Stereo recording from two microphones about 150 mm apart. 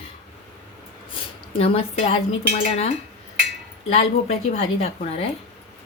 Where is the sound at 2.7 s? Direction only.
45° left (ahead or behind).